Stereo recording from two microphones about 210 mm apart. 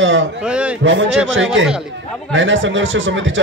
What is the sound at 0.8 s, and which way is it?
Speech, 65° right (ahead or behind).